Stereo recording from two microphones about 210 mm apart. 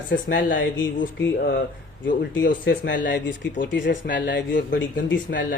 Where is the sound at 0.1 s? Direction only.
60° left (ahead or behind).